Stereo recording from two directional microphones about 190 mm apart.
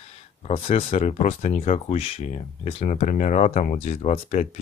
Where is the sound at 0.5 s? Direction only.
30° left (ahead or behind).